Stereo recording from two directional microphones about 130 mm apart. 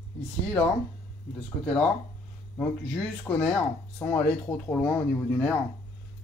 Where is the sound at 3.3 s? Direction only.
10° left (ahead or behind).